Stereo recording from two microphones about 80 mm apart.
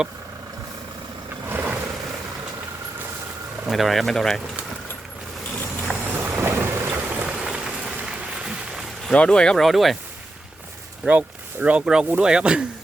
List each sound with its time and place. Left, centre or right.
1.5 s vehicle: right
3.7 s speech: centre
6.1 s thunder: right
6.9 s applause: centre
9.1 s speech: centre
11.0 s speech: centre